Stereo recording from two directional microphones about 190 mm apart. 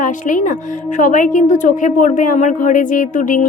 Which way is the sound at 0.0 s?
45° left (ahead or behind).